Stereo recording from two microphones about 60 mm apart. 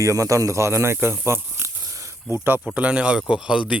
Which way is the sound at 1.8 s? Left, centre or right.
Right.